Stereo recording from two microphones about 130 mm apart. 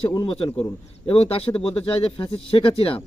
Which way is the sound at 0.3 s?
45° left (ahead or behind).